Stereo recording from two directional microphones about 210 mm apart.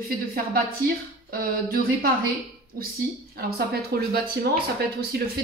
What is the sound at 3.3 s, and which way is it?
Speech, 45° right (ahead or behind).